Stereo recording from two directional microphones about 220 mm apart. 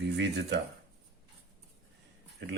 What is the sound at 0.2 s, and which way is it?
Speech, 50° right (ahead or behind).